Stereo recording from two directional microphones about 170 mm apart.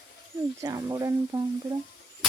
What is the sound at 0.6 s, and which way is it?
Speech, 20° right (ahead or behind).